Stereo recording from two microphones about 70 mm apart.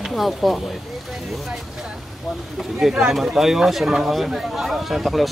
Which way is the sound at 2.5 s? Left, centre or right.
Centre.